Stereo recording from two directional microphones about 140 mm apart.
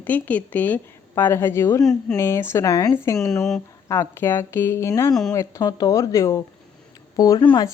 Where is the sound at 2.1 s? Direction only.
20° left (ahead or behind).